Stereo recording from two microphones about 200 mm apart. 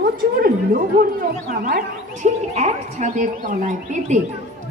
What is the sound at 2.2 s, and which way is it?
A woman's voice, 35° right (ahead or behind).